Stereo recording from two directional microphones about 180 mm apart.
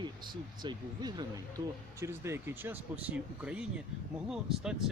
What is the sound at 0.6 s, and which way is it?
Speech, 25° right (ahead or behind).